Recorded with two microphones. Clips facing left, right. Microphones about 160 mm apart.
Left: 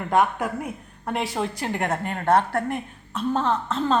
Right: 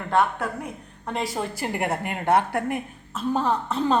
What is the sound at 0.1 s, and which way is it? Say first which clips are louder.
A woman's voice: left 1 dB; 10° left (ahead or behind).